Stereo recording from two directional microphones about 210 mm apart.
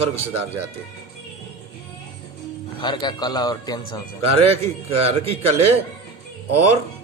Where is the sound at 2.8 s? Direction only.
20° left (ahead or behind).